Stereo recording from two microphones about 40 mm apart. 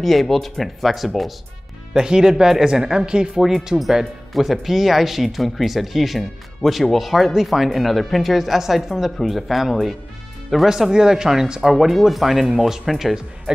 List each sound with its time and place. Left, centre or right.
0.0 s speech: centre
2.0 s speech: centre
10.7 s speech: centre